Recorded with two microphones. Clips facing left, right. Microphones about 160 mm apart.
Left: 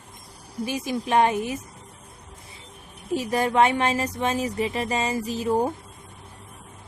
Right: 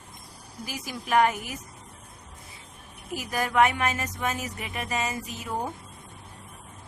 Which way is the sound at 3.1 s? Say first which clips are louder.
Left 6 dB; 30° left (ahead or behind).